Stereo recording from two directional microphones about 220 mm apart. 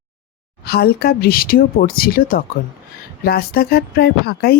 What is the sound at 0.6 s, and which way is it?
Speech, 45° left (ahead or behind).